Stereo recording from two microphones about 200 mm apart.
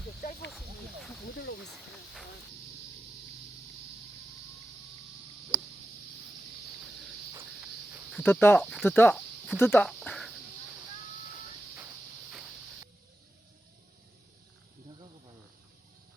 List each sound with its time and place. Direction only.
0.2 s snake: 50° left (ahead or behind)
5.5 s a sound: 5° right (ahead or behind)
8.1 s speech: 10° left (ahead or behind)
9.6 s cricket: 10° left (ahead or behind)